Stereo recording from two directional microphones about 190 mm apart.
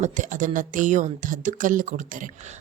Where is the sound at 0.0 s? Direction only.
40° right (ahead or behind).